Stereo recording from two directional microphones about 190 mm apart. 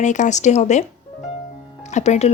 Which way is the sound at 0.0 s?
40° left (ahead or behind).